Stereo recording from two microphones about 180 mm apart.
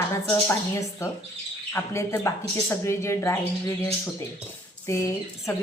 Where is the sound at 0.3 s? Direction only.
15° left (ahead or behind).